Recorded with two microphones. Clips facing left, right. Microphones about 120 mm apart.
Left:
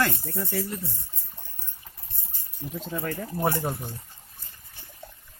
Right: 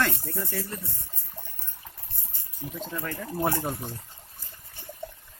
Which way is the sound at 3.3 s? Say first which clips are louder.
Even; centre (ahead or behind).